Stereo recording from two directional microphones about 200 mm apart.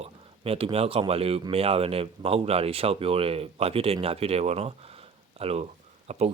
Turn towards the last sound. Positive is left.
turn(degrees=-30)  # may be behind; listen again after turning